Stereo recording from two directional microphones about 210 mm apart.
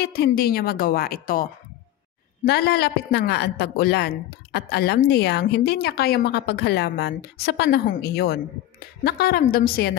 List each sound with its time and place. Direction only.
0.0 s a woman's voice: 50° left (ahead or behind)